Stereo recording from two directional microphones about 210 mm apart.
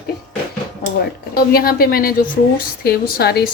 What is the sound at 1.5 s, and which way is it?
A woman's voice, 45° left (ahead or behind).